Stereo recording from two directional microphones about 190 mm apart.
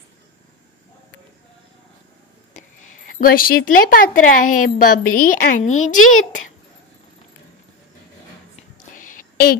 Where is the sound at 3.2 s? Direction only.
50° left (ahead or behind).